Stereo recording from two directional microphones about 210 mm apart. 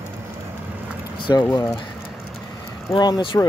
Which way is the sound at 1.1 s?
20° left (ahead or behind).